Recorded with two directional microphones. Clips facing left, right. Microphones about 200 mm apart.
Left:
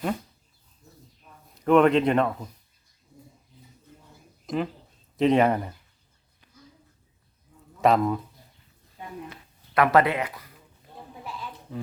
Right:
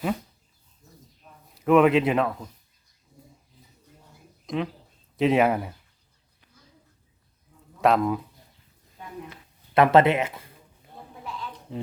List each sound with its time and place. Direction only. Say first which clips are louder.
1.5 s speech: even; 5° right (ahead or behind)
4.4 s speech: left 1 dB; centre (ahead or behind)
7.8 s speech: even; centre (ahead or behind)
9.7 s speech: right 3 dB; 25° right (ahead or behind)
11.7 s speech: right 1 dB; 25° right (ahead or behind)